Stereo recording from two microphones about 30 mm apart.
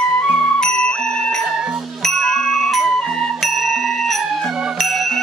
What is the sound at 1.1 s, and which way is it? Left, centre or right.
Music, centre.